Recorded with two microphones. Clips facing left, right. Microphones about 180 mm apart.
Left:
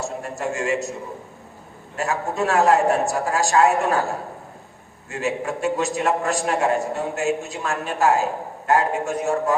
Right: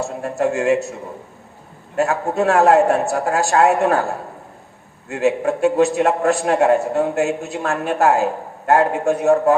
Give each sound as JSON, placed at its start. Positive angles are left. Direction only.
{"t": 0.0, "sound": "a man's voice", "side_deg": -60}
{"t": 2.3, "sound": "a man's voice", "side_deg": -60}
{"t": 5.0, "sound": "a man's voice", "side_deg": -60}